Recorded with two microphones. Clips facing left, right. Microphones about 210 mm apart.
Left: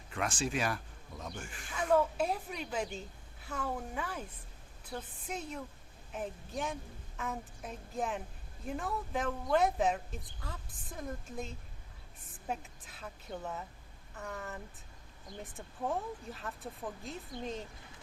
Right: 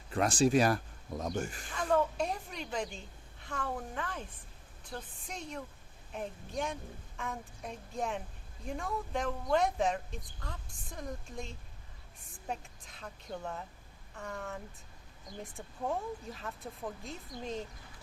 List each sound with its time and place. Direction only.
0.1 s speech: 35° right (ahead or behind)
1.7 s a woman's voice: 5° left (ahead or behind)